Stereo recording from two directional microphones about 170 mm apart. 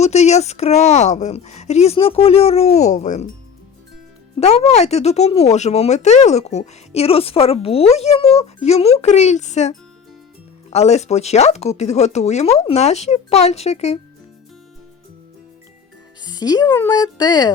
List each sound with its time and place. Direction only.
0.0 s speech: 40° left (ahead or behind)
4.4 s speech: 40° left (ahead or behind)
16.2 s speech: 25° left (ahead or behind)